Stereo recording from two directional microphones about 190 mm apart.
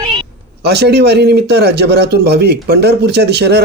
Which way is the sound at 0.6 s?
60° right (ahead or behind).